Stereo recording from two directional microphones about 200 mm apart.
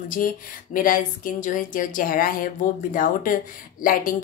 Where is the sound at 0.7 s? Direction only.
45° left (ahead or behind).